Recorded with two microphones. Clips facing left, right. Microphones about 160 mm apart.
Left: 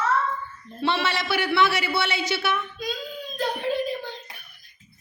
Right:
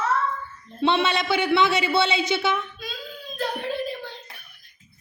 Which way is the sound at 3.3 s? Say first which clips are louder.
Left 2 dB; centre (ahead or behind).